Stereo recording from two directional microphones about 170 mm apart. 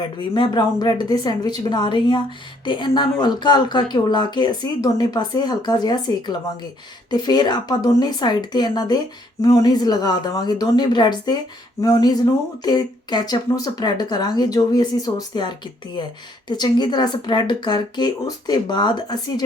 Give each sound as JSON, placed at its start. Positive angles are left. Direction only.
{"t": 0.2, "sound": "speech", "side_deg": 25}